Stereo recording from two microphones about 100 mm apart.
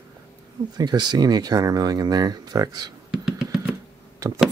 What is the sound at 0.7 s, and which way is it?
Speech, 45° right (ahead or behind).